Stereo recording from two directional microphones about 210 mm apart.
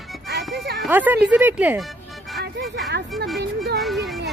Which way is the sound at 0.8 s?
10° right (ahead or behind).